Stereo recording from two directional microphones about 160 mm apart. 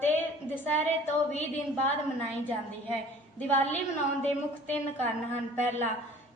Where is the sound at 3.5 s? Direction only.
10° left (ahead or behind).